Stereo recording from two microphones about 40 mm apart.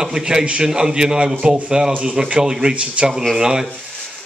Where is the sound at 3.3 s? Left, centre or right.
Centre.